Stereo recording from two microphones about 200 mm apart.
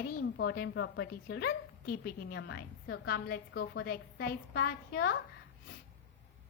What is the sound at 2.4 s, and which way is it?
A woman's voice, 60° left (ahead or behind).